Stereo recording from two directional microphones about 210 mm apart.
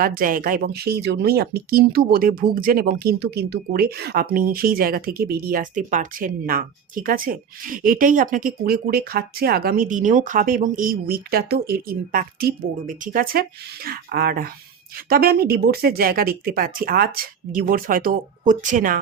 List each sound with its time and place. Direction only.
0.0 s speech: 45° right (ahead or behind)